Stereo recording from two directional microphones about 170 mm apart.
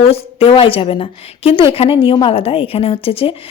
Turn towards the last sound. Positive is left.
turn(degrees=35)  # may be behind; listen again after turning